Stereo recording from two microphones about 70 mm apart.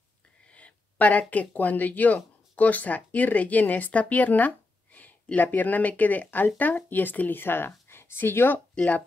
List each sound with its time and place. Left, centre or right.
0.5 s a sound: centre
1.3 s a woman's voice: left
8.7 s speech: left